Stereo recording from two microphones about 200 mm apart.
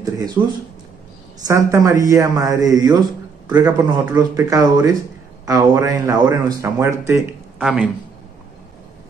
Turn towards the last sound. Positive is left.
turn(degrees=-5)  # may be behind; listen again after turning